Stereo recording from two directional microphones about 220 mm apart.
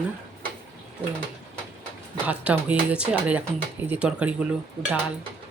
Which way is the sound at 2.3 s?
5° right (ahead or behind).